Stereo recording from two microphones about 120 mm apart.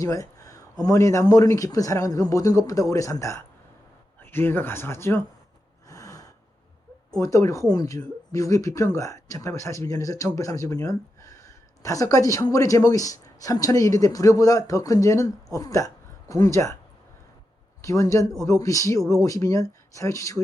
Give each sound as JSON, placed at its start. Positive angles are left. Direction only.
{"t": 0.0, "sound": "speech", "side_deg": 25}
{"t": 5.9, "sound": "gasp", "side_deg": 30}
{"t": 7.2, "sound": "speech", "side_deg": 25}
{"t": 17.8, "sound": "speech", "side_deg": 25}